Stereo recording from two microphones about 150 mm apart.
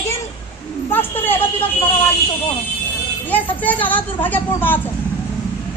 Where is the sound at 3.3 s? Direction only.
10° left (ahead or behind).